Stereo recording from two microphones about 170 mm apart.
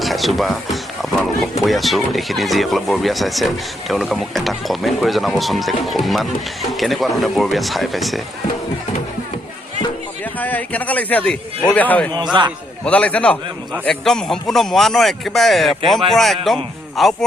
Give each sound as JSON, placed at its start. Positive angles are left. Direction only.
{"t": 0.0, "sound": "speech", "side_deg": 0}
{"t": 10.3, "sound": "a man's voice", "side_deg": 10}
{"t": 12.1, "sound": "a man's voice", "side_deg": -25}
{"t": 12.8, "sound": "a man's voice", "side_deg": 5}